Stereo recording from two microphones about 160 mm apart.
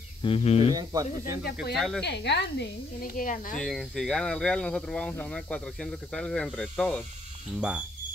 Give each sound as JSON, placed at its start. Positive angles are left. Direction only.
{"t": 0.2, "sound": "speech", "side_deg": 35}
{"t": 0.7, "sound": "speech", "side_deg": -20}
{"t": 1.4, "sound": "speech", "side_deg": 90}
{"t": 1.8, "sound": "speech", "side_deg": 5}
{"t": 2.0, "sound": "speech", "side_deg": 90}
{"t": 3.5, "sound": "speech", "side_deg": 0}